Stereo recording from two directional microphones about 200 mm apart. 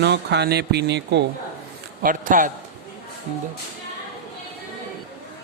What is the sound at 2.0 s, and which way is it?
Speech, 40° right (ahead or behind).